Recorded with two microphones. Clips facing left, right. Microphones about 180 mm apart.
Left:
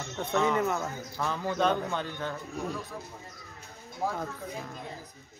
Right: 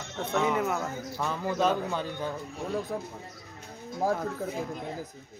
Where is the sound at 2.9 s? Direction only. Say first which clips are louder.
Right 7 dB; 60° right (ahead or behind).